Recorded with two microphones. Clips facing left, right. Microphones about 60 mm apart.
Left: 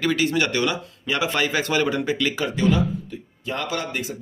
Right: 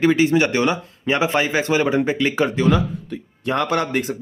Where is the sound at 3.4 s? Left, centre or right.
Right.